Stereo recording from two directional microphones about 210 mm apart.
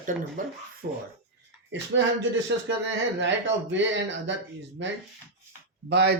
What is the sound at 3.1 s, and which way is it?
Speech, 60° right (ahead or behind).